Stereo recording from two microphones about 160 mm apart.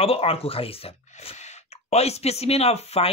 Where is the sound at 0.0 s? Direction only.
35° left (ahead or behind).